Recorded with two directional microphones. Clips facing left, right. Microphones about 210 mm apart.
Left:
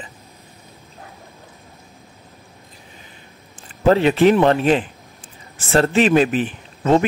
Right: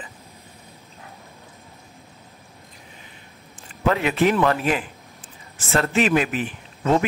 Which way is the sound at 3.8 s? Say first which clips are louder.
Left 6 dB; 30° left (ahead or behind).